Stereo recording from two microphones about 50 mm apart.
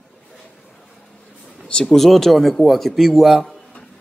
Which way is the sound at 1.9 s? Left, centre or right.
Centre.